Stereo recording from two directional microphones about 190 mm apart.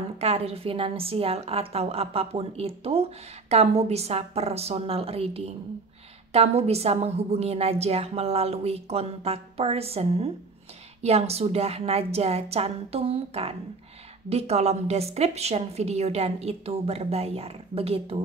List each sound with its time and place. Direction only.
0.2 s a woman's voice: 35° right (ahead or behind)